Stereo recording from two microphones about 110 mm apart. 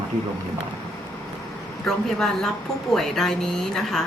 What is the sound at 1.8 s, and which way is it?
A woman's voice, 5° left (ahead or behind).